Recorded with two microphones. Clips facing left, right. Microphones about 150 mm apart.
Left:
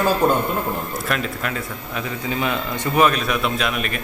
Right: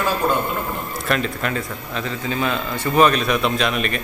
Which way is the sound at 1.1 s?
Centre (ahead or behind).